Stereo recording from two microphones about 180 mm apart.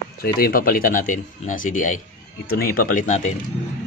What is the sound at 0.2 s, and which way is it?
Speech, 55° left (ahead or behind).